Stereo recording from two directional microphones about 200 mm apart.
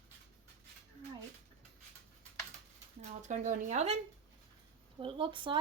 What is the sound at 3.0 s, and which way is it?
Speech, 35° right (ahead or behind).